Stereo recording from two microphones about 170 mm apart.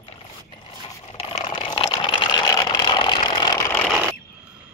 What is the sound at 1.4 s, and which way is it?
Vehicle, 30° left (ahead or behind).